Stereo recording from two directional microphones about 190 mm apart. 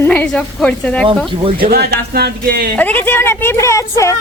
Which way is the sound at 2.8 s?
10° left (ahead or behind).